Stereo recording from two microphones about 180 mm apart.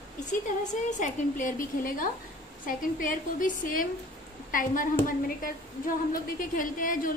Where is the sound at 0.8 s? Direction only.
45° left (ahead or behind).